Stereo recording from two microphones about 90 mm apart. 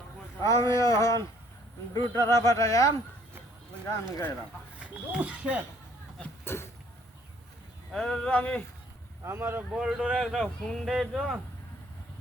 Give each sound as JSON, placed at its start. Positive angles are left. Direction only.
{"t": 0.4, "sound": "speech", "side_deg": 40}
{"t": 4.8, "sound": "speech", "side_deg": -15}
{"t": 6.4, "sound": "a sound", "side_deg": 25}
{"t": 7.9, "sound": "speech", "side_deg": 5}
{"t": 9.2, "sound": "speech", "side_deg": -30}
{"t": 9.7, "sound": "speech", "side_deg": -10}